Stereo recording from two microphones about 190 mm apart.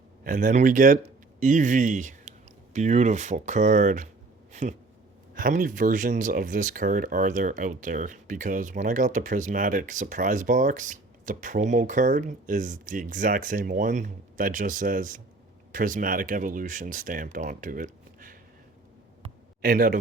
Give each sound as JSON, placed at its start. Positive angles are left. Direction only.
{"t": 0.3, "sound": "speech", "side_deg": -40}
{"t": 5.3, "sound": "speech", "side_deg": -45}
{"t": 19.6, "sound": "speech", "side_deg": -45}